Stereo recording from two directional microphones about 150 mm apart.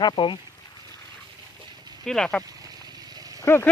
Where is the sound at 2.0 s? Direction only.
5° left (ahead or behind).